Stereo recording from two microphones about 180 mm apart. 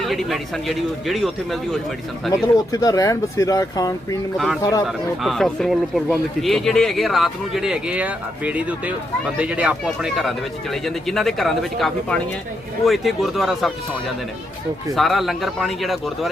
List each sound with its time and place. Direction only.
0.0 s speech: centre (ahead or behind)
2.3 s speech: 20° left (ahead or behind)
4.9 s speech: centre (ahead or behind)
14.9 s speech: centre (ahead or behind)